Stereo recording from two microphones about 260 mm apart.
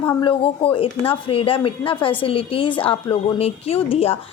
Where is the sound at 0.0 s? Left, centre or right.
Centre.